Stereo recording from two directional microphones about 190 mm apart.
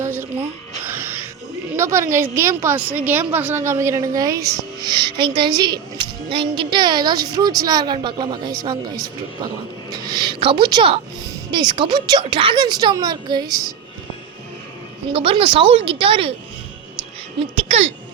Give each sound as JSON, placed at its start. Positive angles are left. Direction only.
{"t": 0.0, "sound": "a sound", "side_deg": -10}
{"t": 0.9, "sound": "music", "side_deg": -10}
{"t": 1.7, "sound": "a woman's voice", "side_deg": -15}
{"t": 15.1, "sound": "speech", "side_deg": -30}
{"t": 17.5, "sound": "speech", "side_deg": -30}